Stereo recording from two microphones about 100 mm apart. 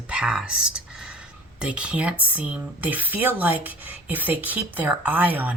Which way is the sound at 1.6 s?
10° right (ahead or behind).